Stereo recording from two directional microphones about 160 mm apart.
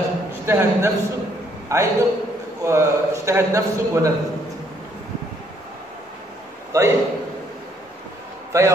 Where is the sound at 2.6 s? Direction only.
15° right (ahead or behind).